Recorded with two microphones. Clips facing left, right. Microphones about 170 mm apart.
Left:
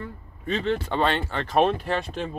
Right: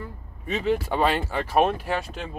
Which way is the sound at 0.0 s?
10° right (ahead or behind).